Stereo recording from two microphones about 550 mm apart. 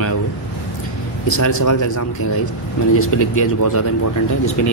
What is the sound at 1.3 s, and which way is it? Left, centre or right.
Speech, left.